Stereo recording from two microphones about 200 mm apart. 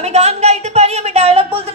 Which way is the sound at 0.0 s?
30° right (ahead or behind).